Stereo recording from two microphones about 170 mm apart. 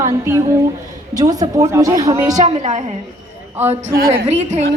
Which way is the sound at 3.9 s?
60° right (ahead or behind).